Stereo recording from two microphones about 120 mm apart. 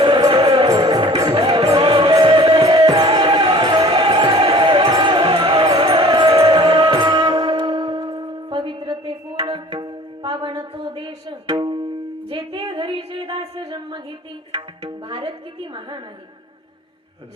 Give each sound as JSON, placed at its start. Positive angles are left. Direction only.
{"t": 0.4, "sound": "music", "side_deg": -40}
{"t": 0.9, "sound": "music", "side_deg": -50}
{"t": 1.1, "sound": "music", "side_deg": -30}
{"t": 1.8, "sound": "music", "side_deg": -50}
{"t": 2.0, "sound": "music", "side_deg": -35}
{"t": 3.4, "sound": "a sound", "side_deg": -45}
{"t": 4.0, "sound": "basketball bounce", "side_deg": -40}
{"t": 4.9, "sound": "music", "side_deg": -40}
{"t": 12.3, "sound": "a sound", "side_deg": -45}
{"t": 14.5, "sound": "tabla", "side_deg": -45}